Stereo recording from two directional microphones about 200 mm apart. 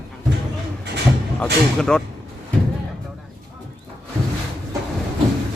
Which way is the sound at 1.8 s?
5° left (ahead or behind).